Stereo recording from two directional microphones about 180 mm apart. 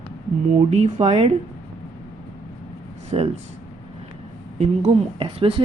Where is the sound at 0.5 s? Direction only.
40° right (ahead or behind).